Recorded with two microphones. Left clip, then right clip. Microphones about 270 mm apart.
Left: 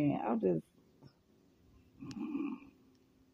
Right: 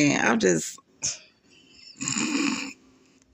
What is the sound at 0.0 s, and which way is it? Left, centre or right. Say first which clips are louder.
Speech: right 12 dB; left.